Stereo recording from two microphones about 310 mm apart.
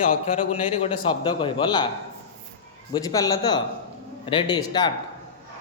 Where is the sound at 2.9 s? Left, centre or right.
Centre.